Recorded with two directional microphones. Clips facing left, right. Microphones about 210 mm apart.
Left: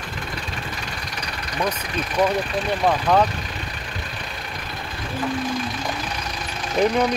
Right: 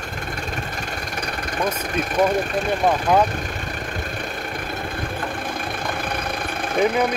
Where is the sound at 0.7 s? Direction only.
50° right (ahead or behind).